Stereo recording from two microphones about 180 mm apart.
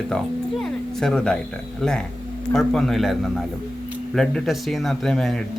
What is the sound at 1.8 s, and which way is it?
Speech, 5° left (ahead or behind).